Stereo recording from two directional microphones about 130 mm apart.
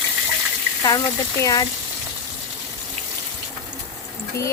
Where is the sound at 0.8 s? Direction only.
25° left (ahead or behind).